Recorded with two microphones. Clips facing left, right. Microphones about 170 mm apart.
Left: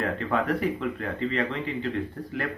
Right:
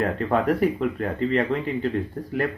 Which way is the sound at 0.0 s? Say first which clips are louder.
Right 4 dB; 45° right (ahead or behind).